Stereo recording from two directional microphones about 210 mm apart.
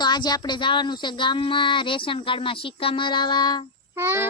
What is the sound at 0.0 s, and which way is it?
Speech, 20° left (ahead or behind).